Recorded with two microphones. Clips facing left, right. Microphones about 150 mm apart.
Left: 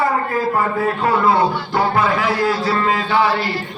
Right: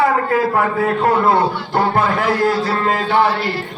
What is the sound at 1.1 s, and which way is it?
A man's voice, 55° right (ahead or behind).